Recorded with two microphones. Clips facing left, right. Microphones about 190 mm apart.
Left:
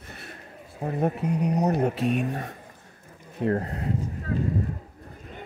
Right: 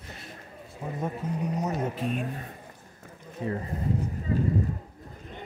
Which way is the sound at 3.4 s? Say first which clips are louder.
Left 6 dB; 70° left (ahead or behind).